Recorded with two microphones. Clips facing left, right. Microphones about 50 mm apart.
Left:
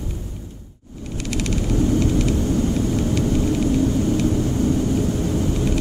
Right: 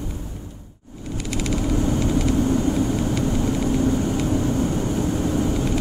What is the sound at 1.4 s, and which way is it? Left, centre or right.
Vehicle, centre.